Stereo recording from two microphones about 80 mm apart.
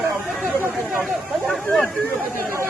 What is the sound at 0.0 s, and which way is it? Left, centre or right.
Chatter, right.